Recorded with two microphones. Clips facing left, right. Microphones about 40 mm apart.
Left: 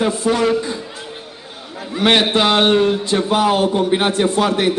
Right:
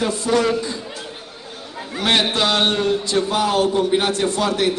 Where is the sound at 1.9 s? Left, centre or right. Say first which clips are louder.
Left 4 dB; centre.